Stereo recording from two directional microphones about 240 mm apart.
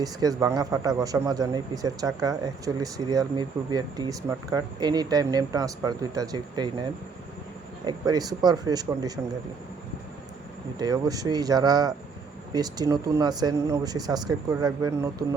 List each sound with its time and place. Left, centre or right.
0.0 s a man's voice: centre
7.9 s a man's voice: centre
10.8 s a man's voice: centre